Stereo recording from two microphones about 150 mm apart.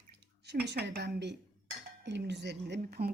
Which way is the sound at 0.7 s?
90° right.